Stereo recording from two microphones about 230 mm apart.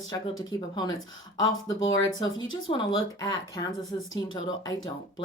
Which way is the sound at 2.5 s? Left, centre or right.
Left.